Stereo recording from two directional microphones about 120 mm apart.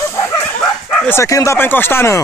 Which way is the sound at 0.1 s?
20° left (ahead or behind).